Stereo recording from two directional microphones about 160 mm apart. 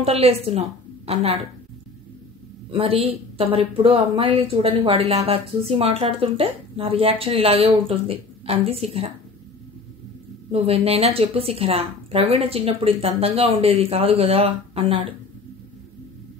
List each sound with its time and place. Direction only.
0.0 s a woman's voice: 40° right (ahead or behind)
2.7 s speech: 35° right (ahead or behind)
10.5 s speech: 40° right (ahead or behind)